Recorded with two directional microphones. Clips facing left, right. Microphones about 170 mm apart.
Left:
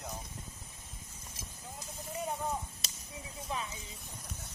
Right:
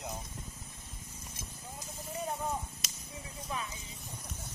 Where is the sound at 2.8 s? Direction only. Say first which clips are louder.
Right 1 dB; 35° left (ahead or behind).